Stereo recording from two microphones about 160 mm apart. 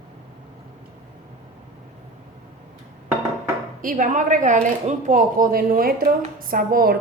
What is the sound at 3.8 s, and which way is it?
A woman's voice, 55° right (ahead or behind).